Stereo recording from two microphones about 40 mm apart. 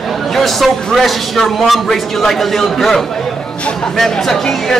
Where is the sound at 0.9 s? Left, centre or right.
Centre.